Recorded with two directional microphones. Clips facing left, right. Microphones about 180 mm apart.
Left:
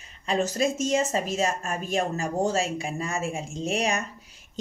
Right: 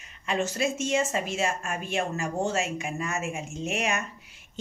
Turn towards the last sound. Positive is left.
turn(degrees=35)  # may be behind; listen again after turning